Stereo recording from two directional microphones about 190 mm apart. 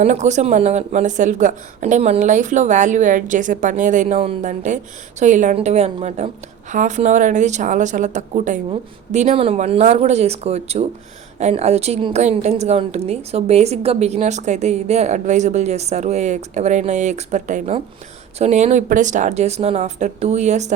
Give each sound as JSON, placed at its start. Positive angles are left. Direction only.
{"t": 0.0, "sound": "a woman's voice", "side_deg": -40}